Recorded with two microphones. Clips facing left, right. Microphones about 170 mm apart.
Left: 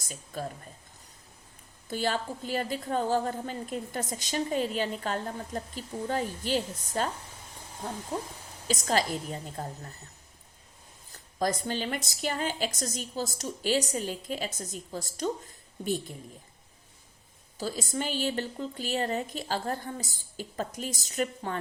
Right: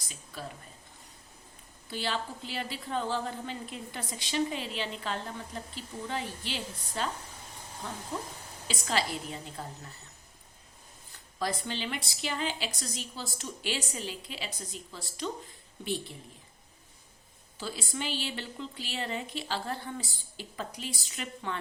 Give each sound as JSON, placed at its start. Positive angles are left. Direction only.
{"t": 0.0, "sound": "speech", "side_deg": 45}
{"t": 1.9, "sound": "a woman's voice", "side_deg": 45}
{"t": 8.6, "sound": "a woman's voice", "side_deg": 45}
{"t": 11.1, "sound": "a woman's voice", "side_deg": 45}
{"t": 17.6, "sound": "a woman's voice", "side_deg": 40}